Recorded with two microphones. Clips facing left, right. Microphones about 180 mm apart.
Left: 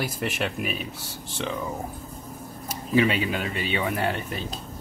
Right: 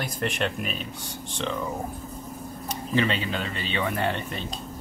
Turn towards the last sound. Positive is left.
turn(degrees=5)  # may be behind; listen again after turning